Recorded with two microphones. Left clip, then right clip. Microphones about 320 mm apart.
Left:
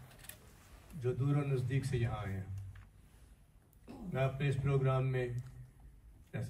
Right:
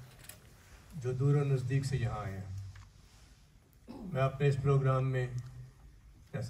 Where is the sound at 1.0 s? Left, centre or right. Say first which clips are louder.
Right 3 dB; right.